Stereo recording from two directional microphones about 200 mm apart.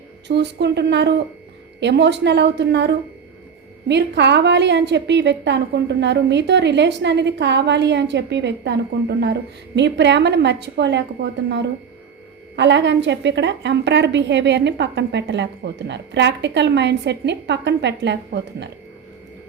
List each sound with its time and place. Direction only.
0.3 s a woman's voice: 55° right (ahead or behind)